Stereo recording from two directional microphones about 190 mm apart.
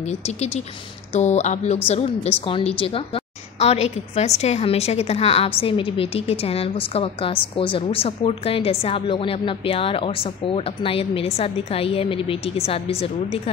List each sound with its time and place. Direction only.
1.1 s a woman's voice: 35° left (ahead or behind)